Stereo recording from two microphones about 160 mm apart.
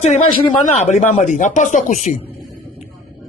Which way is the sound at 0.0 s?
40° left (ahead or behind).